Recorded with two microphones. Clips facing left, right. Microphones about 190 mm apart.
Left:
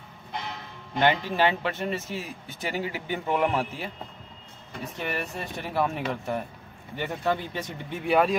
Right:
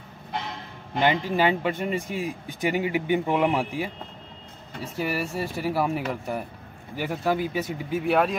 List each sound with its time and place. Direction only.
0.9 s speech: 10° right (ahead or behind)
4.9 s speech: 5° right (ahead or behind)